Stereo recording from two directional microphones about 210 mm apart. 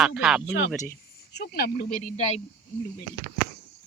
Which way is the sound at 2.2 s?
30° left (ahead or behind).